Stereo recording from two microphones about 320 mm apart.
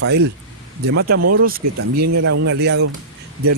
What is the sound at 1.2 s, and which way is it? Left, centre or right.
Speech, right.